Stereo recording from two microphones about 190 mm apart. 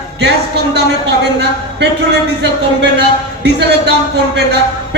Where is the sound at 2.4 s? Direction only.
65° right (ahead or behind).